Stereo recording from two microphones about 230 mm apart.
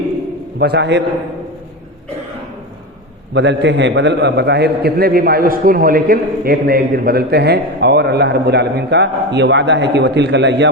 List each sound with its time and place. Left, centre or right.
0.6 s a man's voice: right
3.3 s a man's voice: right